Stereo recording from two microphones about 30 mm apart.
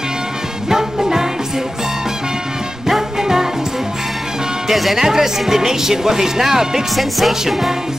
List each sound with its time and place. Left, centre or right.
0.7 s music: centre
3.2 s music: centre
4.6 s speech: centre
4.9 s speech: centre
7.0 s music: centre